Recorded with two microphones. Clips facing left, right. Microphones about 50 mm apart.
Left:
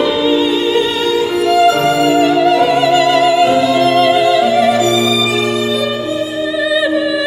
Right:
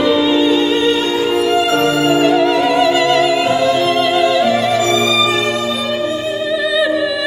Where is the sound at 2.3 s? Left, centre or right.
Centre.